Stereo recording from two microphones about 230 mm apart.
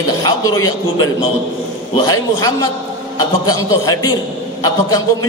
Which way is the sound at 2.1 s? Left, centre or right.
Centre.